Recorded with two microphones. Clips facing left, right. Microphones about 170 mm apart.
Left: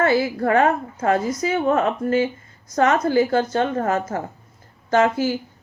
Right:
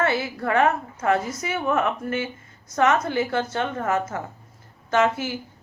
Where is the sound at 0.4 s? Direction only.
30° left (ahead or behind).